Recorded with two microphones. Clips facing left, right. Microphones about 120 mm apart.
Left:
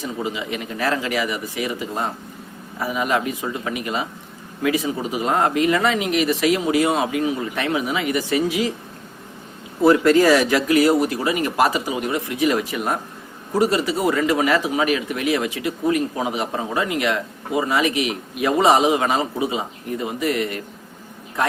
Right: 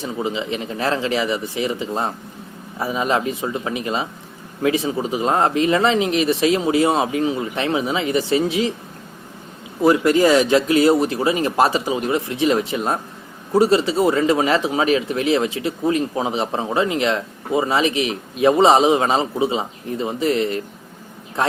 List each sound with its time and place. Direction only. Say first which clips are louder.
0.0 s a man's voice: right 2 dB; 25° right (ahead or behind)
9.8 s a man's voice: left 1 dB; 15° right (ahead or behind)